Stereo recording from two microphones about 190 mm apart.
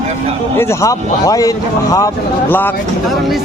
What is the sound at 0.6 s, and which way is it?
Speech, 15° left (ahead or behind).